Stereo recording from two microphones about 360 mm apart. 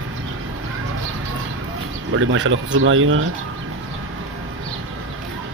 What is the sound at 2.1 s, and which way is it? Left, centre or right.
Speech, right.